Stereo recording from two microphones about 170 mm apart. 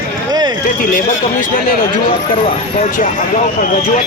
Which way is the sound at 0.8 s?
50° left (ahead or behind).